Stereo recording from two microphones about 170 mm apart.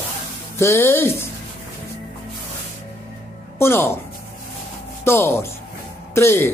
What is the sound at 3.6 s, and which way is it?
Speech, 15° left (ahead or behind).